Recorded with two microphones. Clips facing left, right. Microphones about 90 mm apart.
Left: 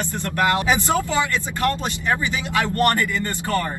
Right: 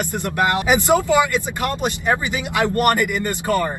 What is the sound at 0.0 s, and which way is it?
Speech, 15° right (ahead or behind).